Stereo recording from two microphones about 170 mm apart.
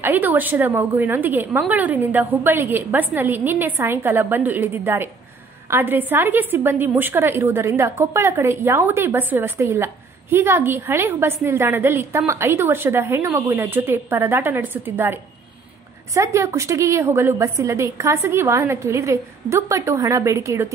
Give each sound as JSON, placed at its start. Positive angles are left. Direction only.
{"t": 0.0, "sound": "a woman's voice", "side_deg": -10}
{"t": 16.2, "sound": "a woman's voice", "side_deg": -20}